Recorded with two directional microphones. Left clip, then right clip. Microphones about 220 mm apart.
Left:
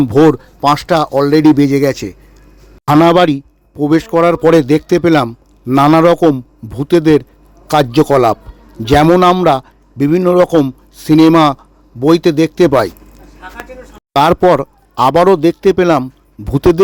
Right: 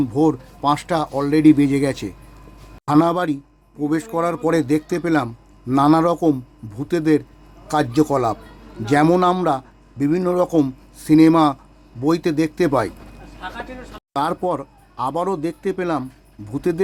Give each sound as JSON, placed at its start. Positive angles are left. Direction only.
{"t": 0.0, "sound": "speech", "side_deg": 35}
{"t": 2.8, "sound": "a man's voice", "side_deg": 35}
{"t": 14.1, "sound": "a man's voice", "side_deg": 40}